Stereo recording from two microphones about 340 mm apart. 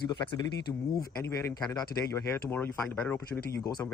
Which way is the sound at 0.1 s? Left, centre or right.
Centre.